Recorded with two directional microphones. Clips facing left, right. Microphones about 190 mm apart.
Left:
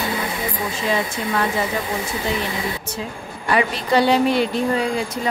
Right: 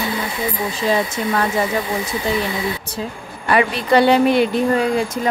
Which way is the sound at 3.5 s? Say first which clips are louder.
Right 3 dB; 60° right (ahead or behind).